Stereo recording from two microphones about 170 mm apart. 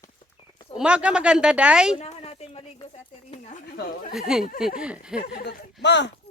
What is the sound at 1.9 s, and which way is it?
A woman's voice, 35° left (ahead or behind).